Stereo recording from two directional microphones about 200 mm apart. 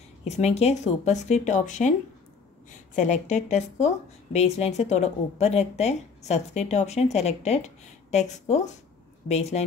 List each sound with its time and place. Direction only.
0.2 s speech: 30° left (ahead or behind)
3.0 s speech: 35° left (ahead or behind)